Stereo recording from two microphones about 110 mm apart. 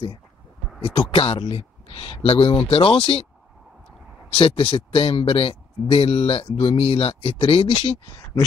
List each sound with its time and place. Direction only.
0.8 s speech: 60° left (ahead or behind)
4.4 s speech: 60° left (ahead or behind)